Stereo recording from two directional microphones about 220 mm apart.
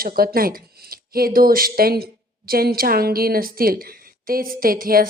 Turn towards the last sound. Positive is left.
turn(degrees=-40)  # may be behind; listen again after turning